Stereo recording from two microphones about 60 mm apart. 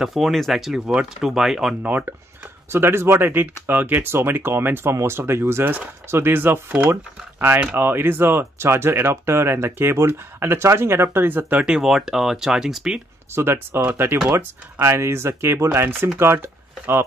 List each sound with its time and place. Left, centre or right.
0.0 s speech: centre
1.8 s speech: right
2.7 s speech: right
6.3 s speech: right
11.6 s speech: centre
13.3 s speech: right
14.8 s speech: right